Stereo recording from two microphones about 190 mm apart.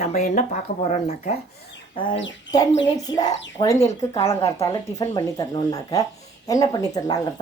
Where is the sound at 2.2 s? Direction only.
75° left (ahead or behind).